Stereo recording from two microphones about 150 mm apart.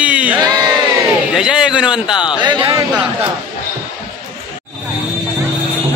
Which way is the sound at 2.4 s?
30° right (ahead or behind).